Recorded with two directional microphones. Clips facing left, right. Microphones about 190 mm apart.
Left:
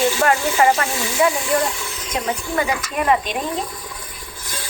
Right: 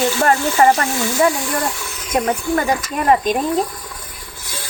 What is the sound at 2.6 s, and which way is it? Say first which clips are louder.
Speech: right 2 dB; 45° right (ahead or behind).